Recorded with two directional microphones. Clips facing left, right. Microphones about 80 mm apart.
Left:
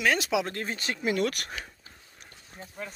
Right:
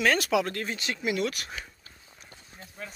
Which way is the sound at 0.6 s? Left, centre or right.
Left.